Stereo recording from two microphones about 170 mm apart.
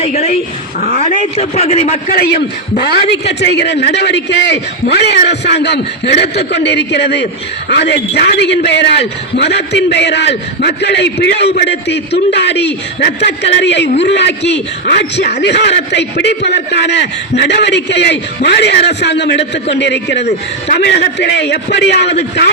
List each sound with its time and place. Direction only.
0.0 s a man's voice: 35° left (ahead or behind)
2.1 s a man's voice: 70° left (ahead or behind)
3.1 s a man's voice: 90° left